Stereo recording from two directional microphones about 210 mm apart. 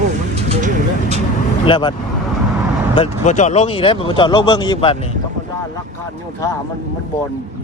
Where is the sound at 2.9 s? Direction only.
30° left (ahead or behind).